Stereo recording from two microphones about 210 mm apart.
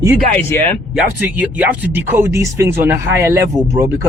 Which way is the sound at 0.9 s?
5° right (ahead or behind).